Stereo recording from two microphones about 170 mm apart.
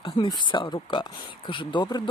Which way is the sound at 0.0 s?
30° left (ahead or behind).